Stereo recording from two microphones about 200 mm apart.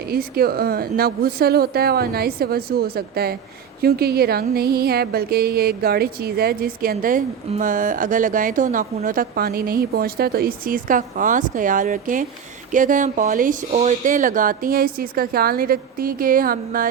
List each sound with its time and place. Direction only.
0.1 s a woman's voice: 50° right (ahead or behind)